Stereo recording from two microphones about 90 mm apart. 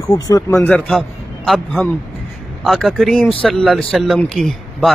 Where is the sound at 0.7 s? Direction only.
5° left (ahead or behind).